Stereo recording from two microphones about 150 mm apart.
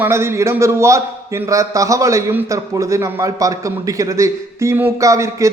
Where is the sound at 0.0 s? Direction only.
15° right (ahead or behind).